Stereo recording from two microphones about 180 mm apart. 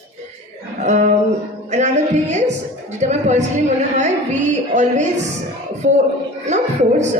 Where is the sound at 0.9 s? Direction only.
45° right (ahead or behind).